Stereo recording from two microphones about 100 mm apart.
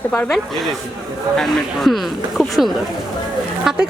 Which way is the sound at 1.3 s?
Centre (ahead or behind).